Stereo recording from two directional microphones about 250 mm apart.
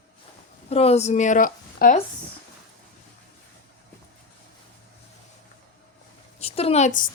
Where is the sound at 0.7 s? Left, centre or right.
Left.